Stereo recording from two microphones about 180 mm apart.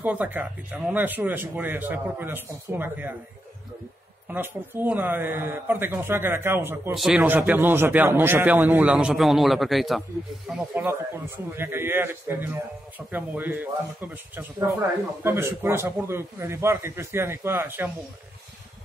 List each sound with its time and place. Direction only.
0.0 s speech: 10° right (ahead or behind)
4.3 s speech: 10° right (ahead or behind)
10.7 s speech: 10° right (ahead or behind)